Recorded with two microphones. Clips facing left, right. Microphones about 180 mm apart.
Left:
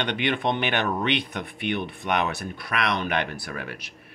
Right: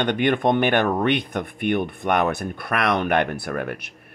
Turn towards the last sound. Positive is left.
turn(degrees=-55)  # may be behind; listen again after turning